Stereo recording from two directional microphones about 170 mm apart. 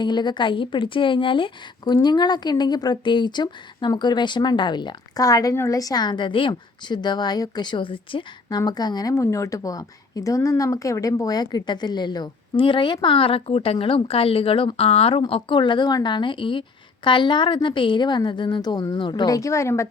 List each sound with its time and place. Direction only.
0.0 s speech: 25° left (ahead or behind)